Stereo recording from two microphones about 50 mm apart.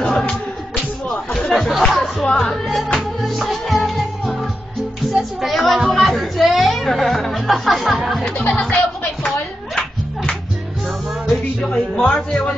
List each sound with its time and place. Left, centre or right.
0.0 s music: centre
1.4 s chatter: centre
2.3 s music: centre
8.3 s music: centre
11.2 s music: centre